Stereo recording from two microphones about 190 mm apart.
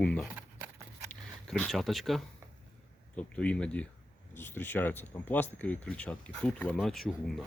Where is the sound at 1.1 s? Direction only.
5° left (ahead or behind).